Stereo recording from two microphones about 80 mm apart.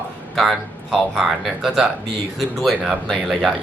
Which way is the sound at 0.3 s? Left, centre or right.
Centre.